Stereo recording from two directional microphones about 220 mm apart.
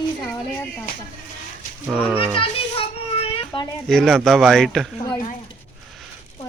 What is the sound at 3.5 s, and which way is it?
Speech, 20° left (ahead or behind).